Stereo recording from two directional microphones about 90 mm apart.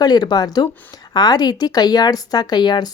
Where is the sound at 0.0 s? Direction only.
45° left (ahead or behind).